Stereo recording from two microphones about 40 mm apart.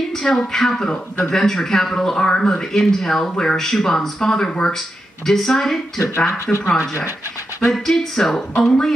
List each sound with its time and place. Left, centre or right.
0.1 s a woman's voice: centre
4.7 s speech: centre
6.1 s speech: left
7.6 s speech: centre